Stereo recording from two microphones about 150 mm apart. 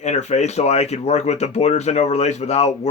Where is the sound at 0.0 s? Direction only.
50° left (ahead or behind).